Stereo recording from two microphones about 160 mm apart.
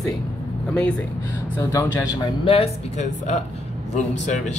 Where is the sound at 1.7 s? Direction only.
20° left (ahead or behind).